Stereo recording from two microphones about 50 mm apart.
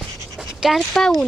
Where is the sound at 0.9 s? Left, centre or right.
Centre.